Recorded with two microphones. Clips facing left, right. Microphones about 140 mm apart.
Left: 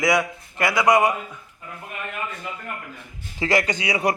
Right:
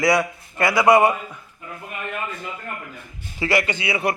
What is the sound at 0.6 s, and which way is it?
Speech, 25° right (ahead or behind).